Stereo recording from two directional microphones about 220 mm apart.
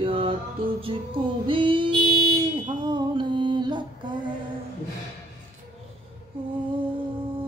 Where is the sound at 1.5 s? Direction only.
25° right (ahead or behind).